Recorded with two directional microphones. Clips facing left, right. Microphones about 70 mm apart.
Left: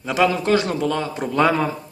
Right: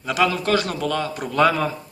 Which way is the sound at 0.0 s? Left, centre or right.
Left.